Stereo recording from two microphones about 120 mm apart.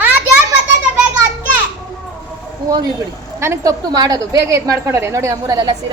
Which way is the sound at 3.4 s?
20° right (ahead or behind).